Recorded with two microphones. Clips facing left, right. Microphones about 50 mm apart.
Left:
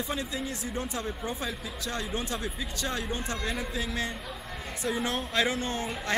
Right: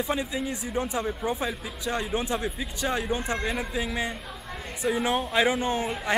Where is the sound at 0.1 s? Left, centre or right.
Centre.